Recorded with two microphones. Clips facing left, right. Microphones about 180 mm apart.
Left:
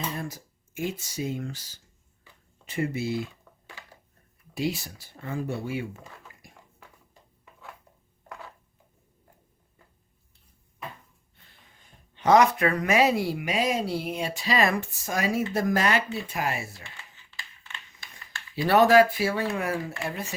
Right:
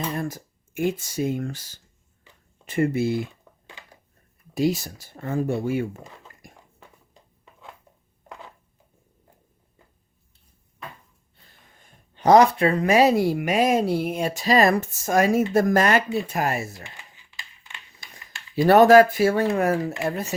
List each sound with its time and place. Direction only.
0.1 s speech: 50° right (ahead or behind)
4.5 s speech: 40° right (ahead or behind)
6.4 s a sound: 45° right (ahead or behind)
12.1 s speech: 35° right (ahead or behind)
16.8 s a sound: 15° right (ahead or behind)
18.5 s speech: 45° right (ahead or behind)